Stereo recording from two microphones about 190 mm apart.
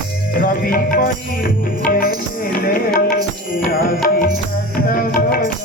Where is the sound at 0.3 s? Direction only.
45° left (ahead or behind).